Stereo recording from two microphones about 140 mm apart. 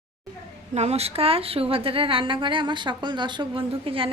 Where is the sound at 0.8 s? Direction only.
50° right (ahead or behind).